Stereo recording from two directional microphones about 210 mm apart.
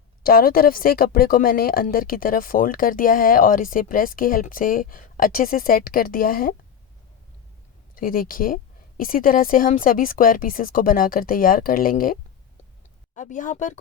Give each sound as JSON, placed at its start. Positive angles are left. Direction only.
{"t": 0.2, "sound": "speech", "side_deg": 45}
{"t": 7.9, "sound": "speech", "side_deg": 40}
{"t": 13.1, "sound": "speech", "side_deg": 40}